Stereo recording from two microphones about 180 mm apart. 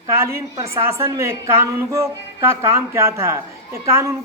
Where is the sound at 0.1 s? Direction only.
15° right (ahead or behind).